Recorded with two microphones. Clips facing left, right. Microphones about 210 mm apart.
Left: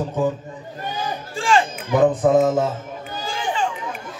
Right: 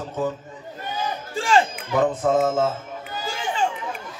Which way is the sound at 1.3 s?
40° right (ahead or behind).